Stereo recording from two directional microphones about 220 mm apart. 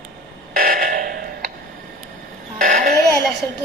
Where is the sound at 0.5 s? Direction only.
40° right (ahead or behind).